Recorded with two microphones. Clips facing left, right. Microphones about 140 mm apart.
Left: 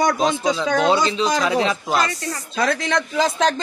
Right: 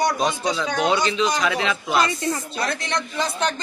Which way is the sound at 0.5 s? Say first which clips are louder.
Left 3 dB; 30° left (ahead or behind).